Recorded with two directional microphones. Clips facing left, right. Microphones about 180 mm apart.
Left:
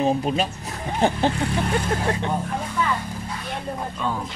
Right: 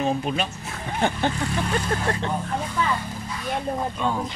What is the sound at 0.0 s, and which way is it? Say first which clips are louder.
Speech: left 3 dB; 35° left (ahead or behind).